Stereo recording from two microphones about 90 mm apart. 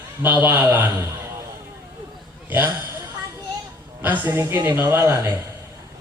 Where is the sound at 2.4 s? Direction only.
20° right (ahead or behind).